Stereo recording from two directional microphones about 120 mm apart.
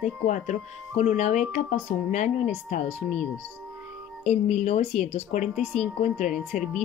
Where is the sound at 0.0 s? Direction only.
85° left.